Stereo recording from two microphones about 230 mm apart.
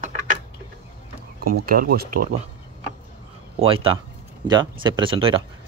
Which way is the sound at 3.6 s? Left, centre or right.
Right.